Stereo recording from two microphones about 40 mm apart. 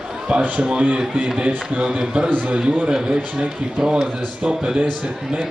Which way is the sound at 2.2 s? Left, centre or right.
Right.